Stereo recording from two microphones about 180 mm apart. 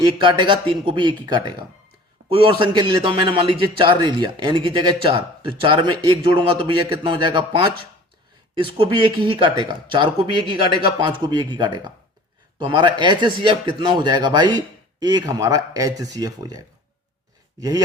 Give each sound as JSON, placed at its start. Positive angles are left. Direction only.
{"t": 0.2, "sound": "a man's voice", "side_deg": -25}